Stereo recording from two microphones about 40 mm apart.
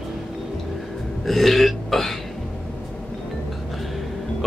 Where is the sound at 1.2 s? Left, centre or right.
Centre.